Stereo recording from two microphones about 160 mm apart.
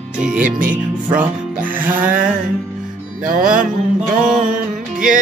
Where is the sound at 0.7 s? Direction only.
10° right (ahead or behind).